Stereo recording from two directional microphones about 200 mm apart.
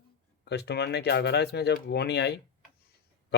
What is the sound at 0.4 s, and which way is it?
Speech, 55° left (ahead or behind).